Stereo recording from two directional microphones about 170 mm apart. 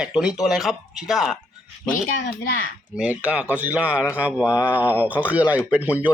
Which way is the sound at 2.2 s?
60° left (ahead or behind).